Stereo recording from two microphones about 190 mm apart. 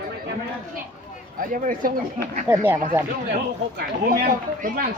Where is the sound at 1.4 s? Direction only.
45° right (ahead or behind).